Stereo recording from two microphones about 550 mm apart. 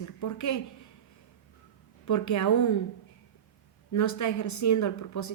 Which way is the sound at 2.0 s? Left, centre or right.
Left.